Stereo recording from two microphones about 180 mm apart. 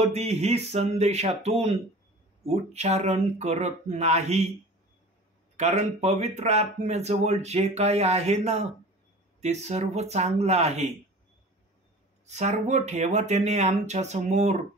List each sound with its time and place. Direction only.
0.0 s speech: 35° right (ahead or behind)
5.6 s speech: 40° right (ahead or behind)
12.3 s speech: 40° right (ahead or behind)